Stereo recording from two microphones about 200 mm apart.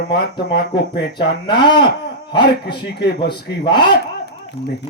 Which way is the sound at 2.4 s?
55° left (ahead or behind).